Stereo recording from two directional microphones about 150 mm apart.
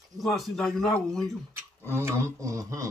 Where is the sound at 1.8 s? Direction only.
15° right (ahead or behind).